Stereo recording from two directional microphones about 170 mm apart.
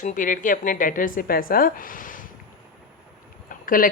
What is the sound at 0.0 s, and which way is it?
A woman's voice, 50° left (ahead or behind).